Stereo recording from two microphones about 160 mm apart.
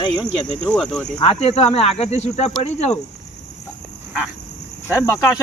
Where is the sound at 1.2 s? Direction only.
40° left (ahead or behind).